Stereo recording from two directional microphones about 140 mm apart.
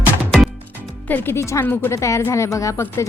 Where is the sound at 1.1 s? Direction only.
15° left (ahead or behind).